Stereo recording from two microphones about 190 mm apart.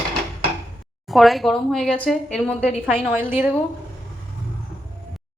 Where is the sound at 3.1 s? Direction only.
10° right (ahead or behind).